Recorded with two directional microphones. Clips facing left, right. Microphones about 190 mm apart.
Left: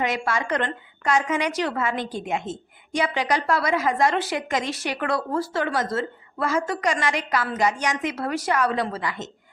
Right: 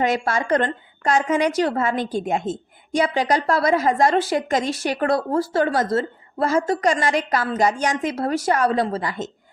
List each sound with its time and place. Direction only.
0.0 s a woman's voice: 40° right (ahead or behind)